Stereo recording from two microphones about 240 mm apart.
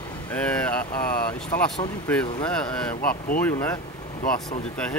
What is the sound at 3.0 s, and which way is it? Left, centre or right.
Speech, left.